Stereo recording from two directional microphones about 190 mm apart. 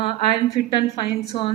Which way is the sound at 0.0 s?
30° left (ahead or behind).